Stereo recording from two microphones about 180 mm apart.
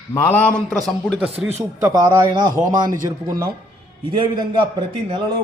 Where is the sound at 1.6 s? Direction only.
20° right (ahead or behind).